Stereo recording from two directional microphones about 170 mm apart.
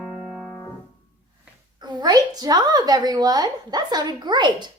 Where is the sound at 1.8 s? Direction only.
25° right (ahead or behind).